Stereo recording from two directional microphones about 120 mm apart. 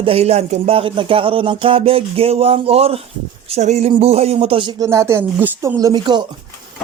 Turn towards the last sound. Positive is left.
turn(degrees=-35)  # may be behind; listen again after turning